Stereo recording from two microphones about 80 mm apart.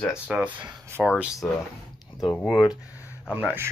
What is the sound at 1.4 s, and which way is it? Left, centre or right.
Speech, centre.